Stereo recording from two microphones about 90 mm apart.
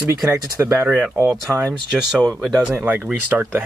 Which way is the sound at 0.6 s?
25° right (ahead or behind).